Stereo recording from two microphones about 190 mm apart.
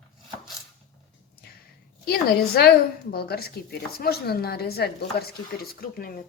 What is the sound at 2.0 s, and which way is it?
Speech, 55° left (ahead or behind).